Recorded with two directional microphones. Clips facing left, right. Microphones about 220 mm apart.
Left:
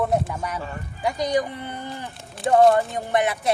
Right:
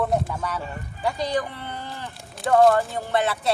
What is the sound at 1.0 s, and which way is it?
Speech, 15° left (ahead or behind).